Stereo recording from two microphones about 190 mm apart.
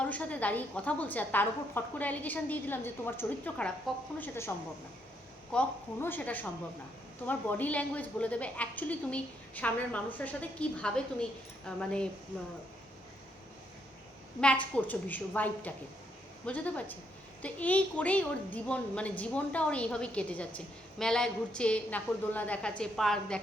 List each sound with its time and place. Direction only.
0.0 s a woman's voice: 5° left (ahead or behind)
14.4 s a woman's voice: 10° left (ahead or behind)